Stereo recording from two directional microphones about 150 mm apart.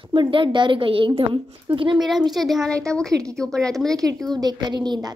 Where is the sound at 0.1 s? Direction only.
35° right (ahead or behind).